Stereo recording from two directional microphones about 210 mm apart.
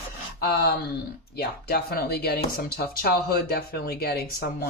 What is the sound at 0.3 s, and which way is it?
Speech, 45° left (ahead or behind).